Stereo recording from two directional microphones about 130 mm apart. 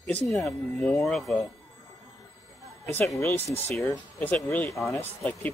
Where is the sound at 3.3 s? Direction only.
20° left (ahead or behind).